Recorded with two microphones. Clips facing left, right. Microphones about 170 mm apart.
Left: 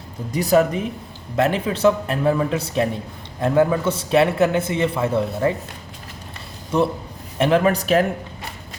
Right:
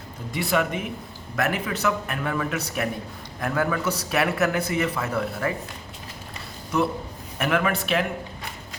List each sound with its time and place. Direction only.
0.3 s a man's voice: 40° left (ahead or behind)
6.7 s a man's voice: 30° left (ahead or behind)